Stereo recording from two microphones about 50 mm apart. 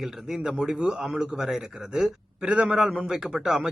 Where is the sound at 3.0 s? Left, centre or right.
Centre.